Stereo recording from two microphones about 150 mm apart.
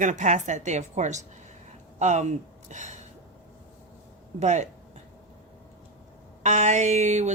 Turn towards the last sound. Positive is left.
turn(degrees=-50)  # may be behind; listen again after turning